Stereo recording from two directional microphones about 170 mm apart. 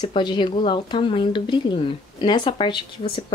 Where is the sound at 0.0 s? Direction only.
25° left (ahead or behind).